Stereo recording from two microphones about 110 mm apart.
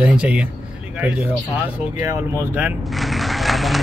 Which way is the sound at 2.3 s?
15° right (ahead or behind).